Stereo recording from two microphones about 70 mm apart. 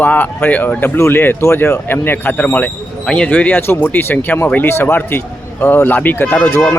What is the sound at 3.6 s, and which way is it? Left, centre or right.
Speech, left.